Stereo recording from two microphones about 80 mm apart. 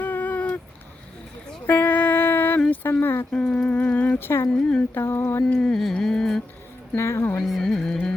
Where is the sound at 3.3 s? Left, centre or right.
Centre.